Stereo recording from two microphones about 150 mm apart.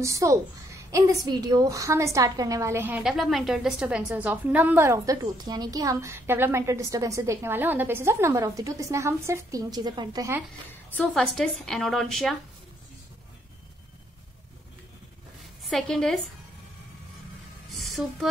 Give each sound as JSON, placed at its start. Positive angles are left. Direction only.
{"t": 0.0, "sound": "a woman's voice", "side_deg": -20}
{"t": 3.0, "sound": "a woman's voice", "side_deg": 0}
{"t": 10.7, "sound": "a woman's voice", "side_deg": 10}
{"t": 15.6, "sound": "a woman's voice", "side_deg": 5}
{"t": 17.6, "sound": "a woman's voice", "side_deg": 0}